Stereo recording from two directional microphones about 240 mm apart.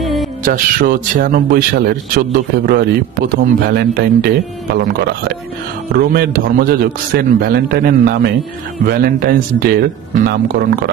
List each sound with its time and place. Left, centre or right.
0.0 s music: centre
0.5 s a man's voice: right
5.9 s a man's voice: right